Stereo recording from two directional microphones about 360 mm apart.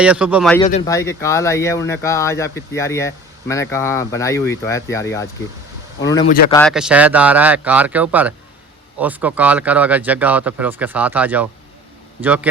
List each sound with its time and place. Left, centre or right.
0.0 s speech: centre
0.6 s speech: centre